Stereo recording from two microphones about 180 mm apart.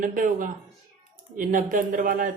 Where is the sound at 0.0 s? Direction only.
50° right (ahead or behind).